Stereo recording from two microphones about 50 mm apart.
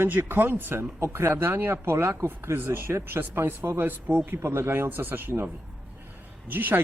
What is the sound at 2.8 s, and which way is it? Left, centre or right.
Speech, right.